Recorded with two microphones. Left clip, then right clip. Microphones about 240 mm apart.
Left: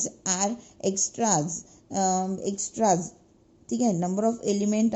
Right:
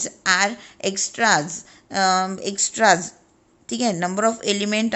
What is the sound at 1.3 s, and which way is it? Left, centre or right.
Speech, centre.